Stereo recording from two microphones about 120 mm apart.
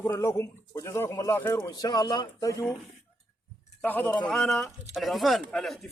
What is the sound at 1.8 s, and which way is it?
Speech, 35° left (ahead or behind).